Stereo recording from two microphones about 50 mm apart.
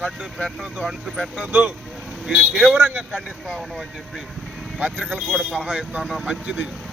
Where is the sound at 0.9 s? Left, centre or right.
Centre.